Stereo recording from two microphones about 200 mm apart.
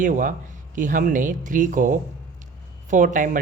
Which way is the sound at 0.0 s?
40° right (ahead or behind).